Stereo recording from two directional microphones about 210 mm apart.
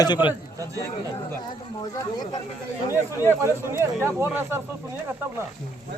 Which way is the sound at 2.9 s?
15° right (ahead or behind).